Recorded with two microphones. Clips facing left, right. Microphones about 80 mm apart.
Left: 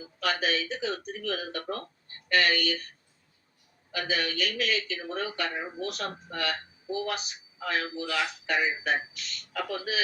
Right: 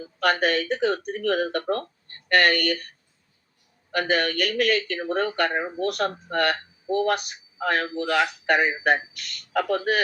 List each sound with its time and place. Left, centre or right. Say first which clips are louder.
0.0 s speech: right 7 dB; right
3.9 s speech: right 7 dB; right